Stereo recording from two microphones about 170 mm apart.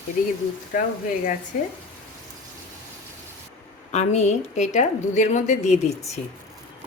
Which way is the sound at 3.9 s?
40° left (ahead or behind).